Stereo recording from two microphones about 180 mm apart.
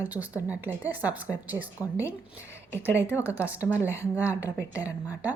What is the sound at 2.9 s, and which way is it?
Speech, 15° left (ahead or behind).